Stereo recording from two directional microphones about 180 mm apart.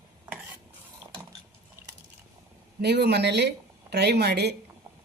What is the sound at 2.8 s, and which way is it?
A woman's voice, 65° right (ahead or behind).